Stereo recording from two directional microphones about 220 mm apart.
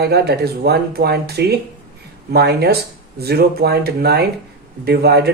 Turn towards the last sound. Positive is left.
turn(degrees=-45)  # may be behind; listen again after turning